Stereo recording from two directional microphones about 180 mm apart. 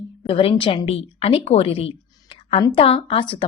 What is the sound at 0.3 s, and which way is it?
A woman's voice, 30° left (ahead or behind).